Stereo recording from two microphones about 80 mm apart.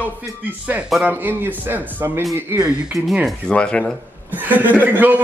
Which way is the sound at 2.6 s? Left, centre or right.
Centre.